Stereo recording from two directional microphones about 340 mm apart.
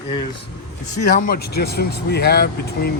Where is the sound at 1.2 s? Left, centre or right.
Left.